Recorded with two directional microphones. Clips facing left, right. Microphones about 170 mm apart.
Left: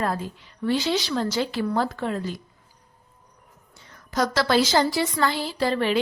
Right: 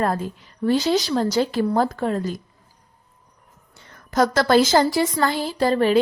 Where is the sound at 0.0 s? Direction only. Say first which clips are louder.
Right 4 dB; 45° right (ahead or behind).